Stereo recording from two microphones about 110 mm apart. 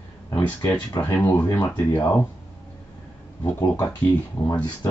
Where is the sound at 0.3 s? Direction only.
30° left (ahead or behind).